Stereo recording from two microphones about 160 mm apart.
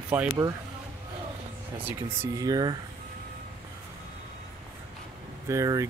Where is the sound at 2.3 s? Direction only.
25° right (ahead or behind).